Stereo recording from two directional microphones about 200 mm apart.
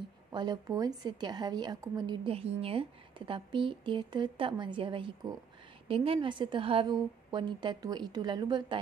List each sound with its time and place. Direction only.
0.3 s a woman's voice: 20° right (ahead or behind)